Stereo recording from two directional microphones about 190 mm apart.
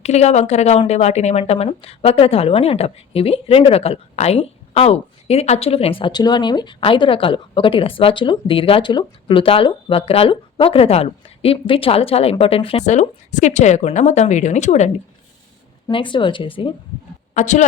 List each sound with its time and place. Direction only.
0.0 s speech: 35° left (ahead or behind)
15.9 s speech: 25° left (ahead or behind)
17.3 s speech: 40° left (ahead or behind)